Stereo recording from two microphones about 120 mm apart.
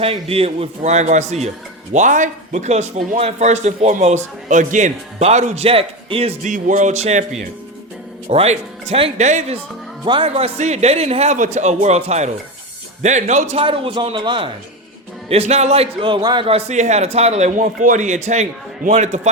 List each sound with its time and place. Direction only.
0.0 s a man's voice: 55° right (ahead or behind); by 1.5 s 70° right (ahead or behind)
1.9 s a man's voice: 85° right
5.6 s a man's voice: 55° right (ahead or behind)
6.4 s music: 90° right; by 7.3 s 70° right (ahead or behind)
8.3 s a man's voice: 65° right (ahead or behind)
9.2 s a man's voice: 75° right (ahead or behind)
10.1 s a man's voice: 50° right (ahead or behind)
13.0 s a man's voice: 80° right
13.7 s a man's voice: 45° right (ahead or behind)
15.3 s a man's voice: 60° right (ahead or behind)
16.0 s a man's voice: 40° right (ahead or behind)
16.5 s a man's voice: 60° right (ahead or behind)